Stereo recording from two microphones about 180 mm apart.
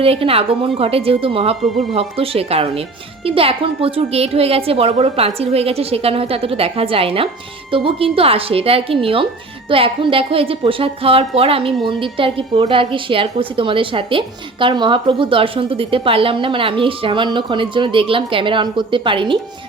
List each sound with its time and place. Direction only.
0.0 s a woman's voice: 30° right (ahead or behind)